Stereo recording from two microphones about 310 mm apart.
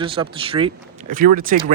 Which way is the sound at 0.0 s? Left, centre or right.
Centre.